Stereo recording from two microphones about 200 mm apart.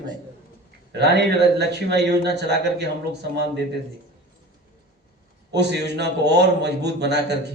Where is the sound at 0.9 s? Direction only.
55° right (ahead or behind).